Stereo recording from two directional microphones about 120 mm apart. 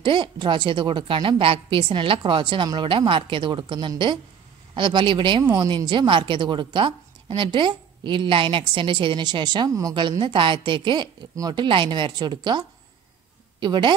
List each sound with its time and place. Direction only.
0.0 s a woman's voice: 45° right (ahead or behind)
5.4 s speech: 25° right (ahead or behind)
5.8 s a woman's voice: 40° right (ahead or behind)
9.9 s a woman's voice: 40° right (ahead or behind)